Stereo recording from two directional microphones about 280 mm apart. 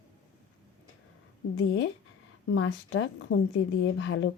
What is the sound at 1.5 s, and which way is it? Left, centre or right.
A woman's voice, left.